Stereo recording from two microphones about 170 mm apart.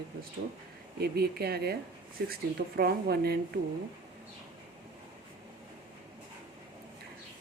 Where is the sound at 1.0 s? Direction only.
65° right (ahead or behind).